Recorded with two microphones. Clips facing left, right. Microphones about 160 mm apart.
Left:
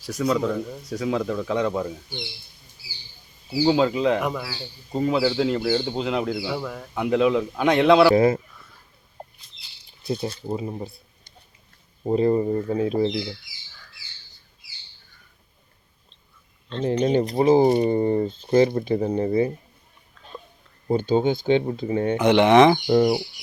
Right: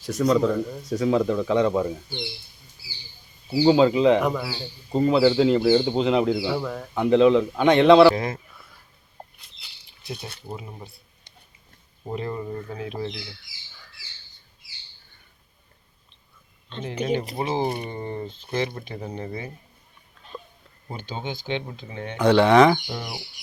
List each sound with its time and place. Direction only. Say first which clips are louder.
0.0 s speech: right 3 dB; 5° left (ahead or behind)
3.7 s speech: right 4 dB; centre (ahead or behind)
4.4 s a man's voice: right 2 dB; 10° right (ahead or behind)
4.9 s speech: right 3 dB; centre (ahead or behind)
8.1 s speech: left 11 dB; 30° left (ahead or behind)
10.5 s speech: left 7 dB; 30° left (ahead or behind)
12.0 s speech: left 10 dB; 35° left (ahead or behind)
17.0 s speech: left 5 dB; 35° left (ahead or behind)
20.9 s speech: left 13 dB; 40° left (ahead or behind)
22.2 s speech: even; 20° left (ahead or behind)
22.9 s speech: left 16 dB; 55° left (ahead or behind)